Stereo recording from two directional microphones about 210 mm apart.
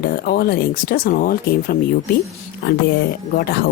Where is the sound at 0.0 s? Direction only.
45° left (ahead or behind).